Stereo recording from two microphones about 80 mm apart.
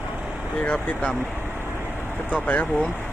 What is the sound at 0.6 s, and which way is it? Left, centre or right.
Speech, centre.